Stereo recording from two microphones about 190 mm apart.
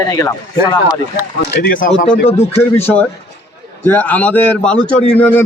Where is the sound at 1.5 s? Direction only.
50° left (ahead or behind).